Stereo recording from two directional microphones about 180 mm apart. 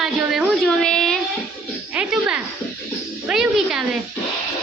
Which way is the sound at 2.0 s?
5° right (ahead or behind).